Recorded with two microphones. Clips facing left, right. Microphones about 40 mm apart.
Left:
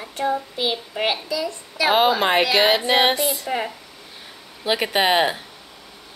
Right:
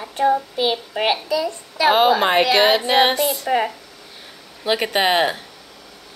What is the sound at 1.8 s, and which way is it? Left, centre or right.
Speech, centre.